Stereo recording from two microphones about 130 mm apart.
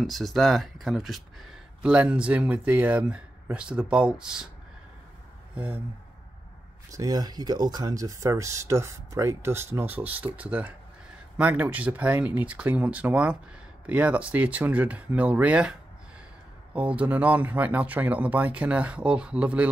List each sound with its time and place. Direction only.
0.0 s speech: centre (ahead or behind)
6.9 s speech: 30° right (ahead or behind); by 15.7 s 10° right (ahead or behind)
16.7 s speech: 10° right (ahead or behind)